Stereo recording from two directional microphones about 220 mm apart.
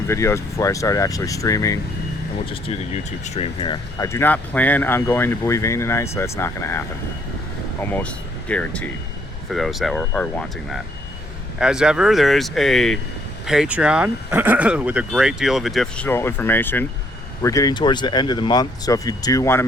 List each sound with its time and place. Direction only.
0.1 s speech: 10° left (ahead or behind)
2.5 s speech: 25° left (ahead or behind)